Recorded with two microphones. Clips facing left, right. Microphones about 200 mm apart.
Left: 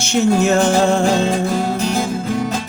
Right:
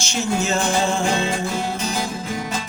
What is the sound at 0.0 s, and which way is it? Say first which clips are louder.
Music: left 8 dB; 60° left (ahead or behind).